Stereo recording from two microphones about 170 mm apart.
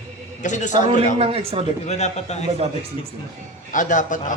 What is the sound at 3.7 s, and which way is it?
Speech, 50° left (ahead or behind).